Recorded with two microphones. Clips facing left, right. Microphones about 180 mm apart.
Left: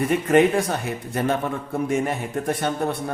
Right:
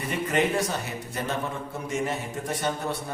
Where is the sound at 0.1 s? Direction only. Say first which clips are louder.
Left 6 dB; 50° left (ahead or behind).